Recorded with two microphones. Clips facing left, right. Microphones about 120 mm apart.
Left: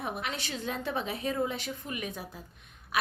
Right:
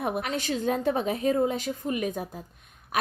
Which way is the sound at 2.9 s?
45° right (ahead or behind).